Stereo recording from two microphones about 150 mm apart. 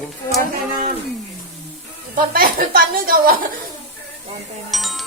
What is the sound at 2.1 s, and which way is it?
A woman's voice, 70° right (ahead or behind).